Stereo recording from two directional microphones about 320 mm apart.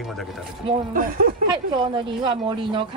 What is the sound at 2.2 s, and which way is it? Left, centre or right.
Speech, centre.